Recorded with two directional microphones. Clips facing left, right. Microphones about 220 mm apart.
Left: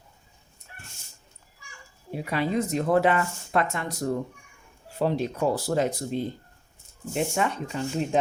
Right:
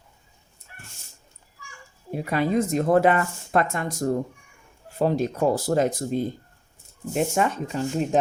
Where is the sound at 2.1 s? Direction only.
45° right (ahead or behind).